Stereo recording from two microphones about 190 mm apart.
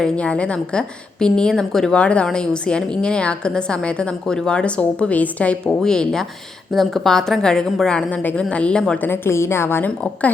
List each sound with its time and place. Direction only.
0.0 s a woman's voice: 5° left (ahead or behind)